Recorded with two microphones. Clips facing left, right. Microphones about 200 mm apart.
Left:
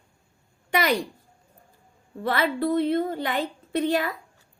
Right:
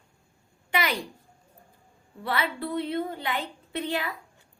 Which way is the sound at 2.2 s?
45° left (ahead or behind).